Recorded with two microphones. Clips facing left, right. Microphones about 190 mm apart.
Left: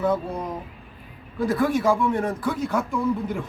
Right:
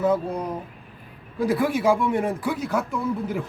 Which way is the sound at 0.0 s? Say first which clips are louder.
Right 2 dB; 5° right (ahead or behind).